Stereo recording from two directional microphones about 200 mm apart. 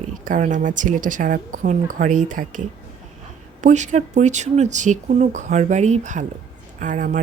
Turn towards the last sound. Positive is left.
turn(degrees=-40)  # may be behind; listen again after turning